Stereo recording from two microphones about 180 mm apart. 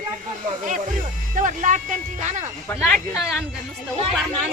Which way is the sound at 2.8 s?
Centre (ahead or behind).